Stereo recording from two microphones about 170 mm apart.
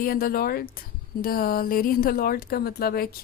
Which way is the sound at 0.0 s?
60° left (ahead or behind).